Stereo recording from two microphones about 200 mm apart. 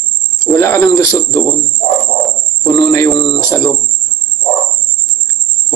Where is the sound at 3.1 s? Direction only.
20° left (ahead or behind).